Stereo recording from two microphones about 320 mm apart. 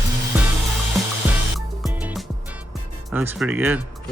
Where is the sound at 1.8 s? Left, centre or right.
Centre.